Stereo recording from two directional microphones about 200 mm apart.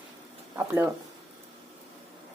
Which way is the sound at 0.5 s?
10° right (ahead or behind).